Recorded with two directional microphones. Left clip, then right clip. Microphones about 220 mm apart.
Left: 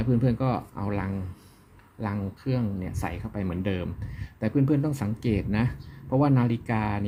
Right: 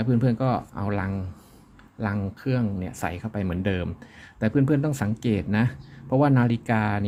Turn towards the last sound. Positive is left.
turn(degrees=-20)  # may be behind; listen again after turning